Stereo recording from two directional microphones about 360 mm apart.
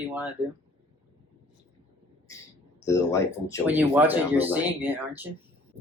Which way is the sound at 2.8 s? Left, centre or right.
Centre.